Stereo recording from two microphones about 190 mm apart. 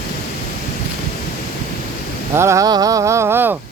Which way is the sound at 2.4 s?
15° right (ahead or behind).